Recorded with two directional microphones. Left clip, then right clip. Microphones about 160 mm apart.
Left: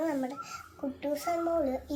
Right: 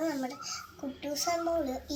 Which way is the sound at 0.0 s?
15° left (ahead or behind).